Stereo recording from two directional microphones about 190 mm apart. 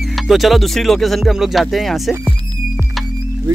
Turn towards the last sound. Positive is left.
turn(degrees=0)  # may be behind; listen again after turning